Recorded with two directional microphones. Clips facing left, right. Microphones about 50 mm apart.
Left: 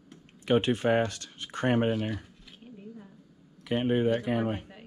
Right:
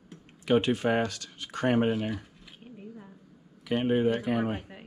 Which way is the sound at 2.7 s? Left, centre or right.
Centre.